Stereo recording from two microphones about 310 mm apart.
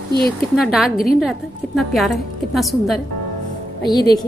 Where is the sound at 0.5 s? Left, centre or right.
Centre.